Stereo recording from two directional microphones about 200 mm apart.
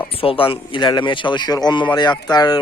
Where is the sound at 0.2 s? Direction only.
25° left (ahead or behind).